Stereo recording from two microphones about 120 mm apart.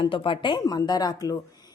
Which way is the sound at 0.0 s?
45° left (ahead or behind).